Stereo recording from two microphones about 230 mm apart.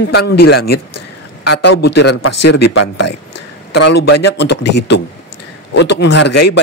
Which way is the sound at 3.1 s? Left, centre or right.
Left.